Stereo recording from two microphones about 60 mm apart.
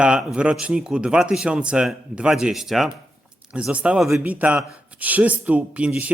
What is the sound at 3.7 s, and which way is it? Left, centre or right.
A man's voice, centre.